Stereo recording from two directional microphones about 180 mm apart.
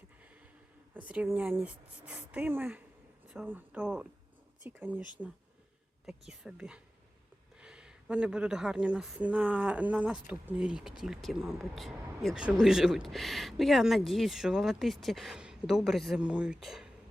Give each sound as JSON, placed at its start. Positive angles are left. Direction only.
{"t": 0.9, "sound": "speech", "side_deg": -10}
{"t": 6.1, "sound": "speech", "side_deg": -5}